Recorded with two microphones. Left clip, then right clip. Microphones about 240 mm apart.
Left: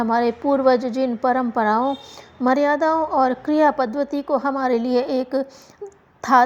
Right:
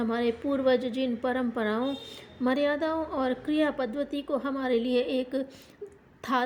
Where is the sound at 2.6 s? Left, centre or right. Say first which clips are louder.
Left 9 dB; left.